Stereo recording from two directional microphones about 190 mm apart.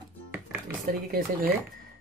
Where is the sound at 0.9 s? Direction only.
50° right (ahead or behind).